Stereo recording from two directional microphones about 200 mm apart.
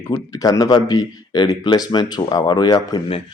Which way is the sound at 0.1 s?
15° left (ahead or behind).